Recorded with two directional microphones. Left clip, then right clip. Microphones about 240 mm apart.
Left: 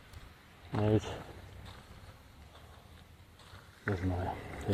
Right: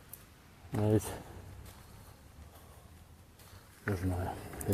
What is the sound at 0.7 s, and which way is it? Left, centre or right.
Speech, centre.